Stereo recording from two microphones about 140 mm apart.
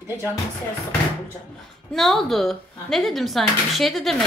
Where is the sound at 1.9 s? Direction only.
Centre (ahead or behind).